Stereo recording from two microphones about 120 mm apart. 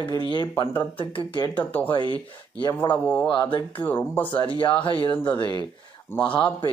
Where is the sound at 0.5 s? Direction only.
25° left (ahead or behind).